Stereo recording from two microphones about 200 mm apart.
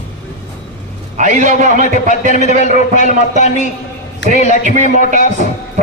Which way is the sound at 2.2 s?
35° left (ahead or behind).